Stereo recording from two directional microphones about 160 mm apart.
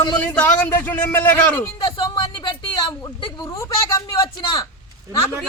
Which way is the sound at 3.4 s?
20° left (ahead or behind).